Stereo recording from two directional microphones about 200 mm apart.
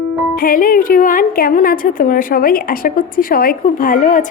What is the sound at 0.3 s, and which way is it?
A woman's voice, 45° left (ahead or behind).